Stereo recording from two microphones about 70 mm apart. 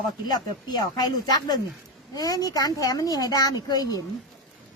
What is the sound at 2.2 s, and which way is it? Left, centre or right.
Speech, left.